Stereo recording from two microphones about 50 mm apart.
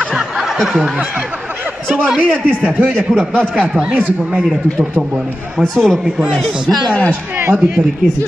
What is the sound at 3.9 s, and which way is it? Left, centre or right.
Speech, right.